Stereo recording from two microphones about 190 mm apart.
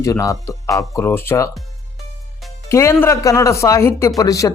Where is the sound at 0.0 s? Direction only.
15° left (ahead or behind).